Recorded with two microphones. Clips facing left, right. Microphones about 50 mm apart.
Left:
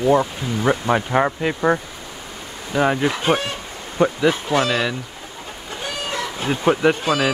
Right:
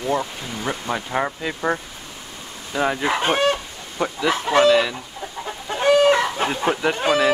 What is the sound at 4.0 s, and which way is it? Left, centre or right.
Speech, left.